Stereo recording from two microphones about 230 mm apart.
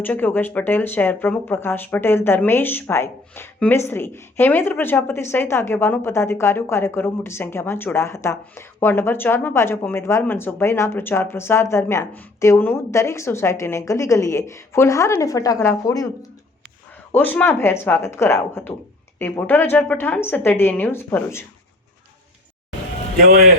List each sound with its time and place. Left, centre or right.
0.0 s speech: centre
17.1 s speech: centre
23.2 s a man's voice: right